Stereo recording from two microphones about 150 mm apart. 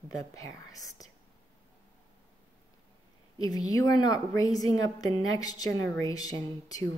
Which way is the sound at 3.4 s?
25° left (ahead or behind).